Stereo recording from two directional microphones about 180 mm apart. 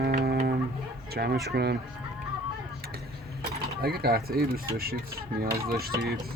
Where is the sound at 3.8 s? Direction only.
60° right (ahead or behind).